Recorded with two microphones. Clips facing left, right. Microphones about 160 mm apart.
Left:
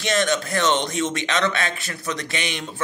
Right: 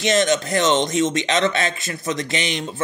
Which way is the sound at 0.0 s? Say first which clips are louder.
Right 3 dB; 20° right (ahead or behind).